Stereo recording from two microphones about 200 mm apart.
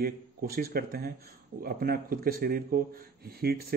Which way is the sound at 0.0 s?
50° right (ahead or behind).